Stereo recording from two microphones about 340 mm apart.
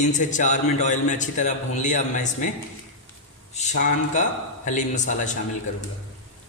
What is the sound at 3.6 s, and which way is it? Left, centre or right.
A man's voice, left.